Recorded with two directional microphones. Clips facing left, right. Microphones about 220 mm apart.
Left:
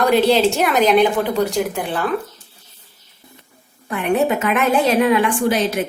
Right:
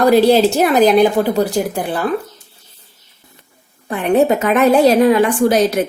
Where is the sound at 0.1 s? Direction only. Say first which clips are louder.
Right 4 dB; 40° right (ahead or behind).